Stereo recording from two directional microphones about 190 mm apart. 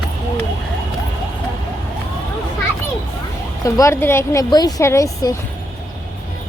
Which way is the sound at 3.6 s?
15° left (ahead or behind).